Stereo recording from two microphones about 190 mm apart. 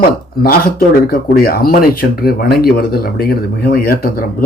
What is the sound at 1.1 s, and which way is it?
Speech, 50° left (ahead or behind).